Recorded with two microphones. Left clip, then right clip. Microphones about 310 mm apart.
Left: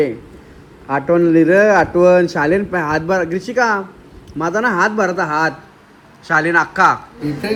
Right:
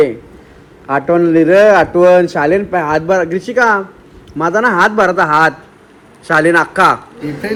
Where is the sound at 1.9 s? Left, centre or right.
Right.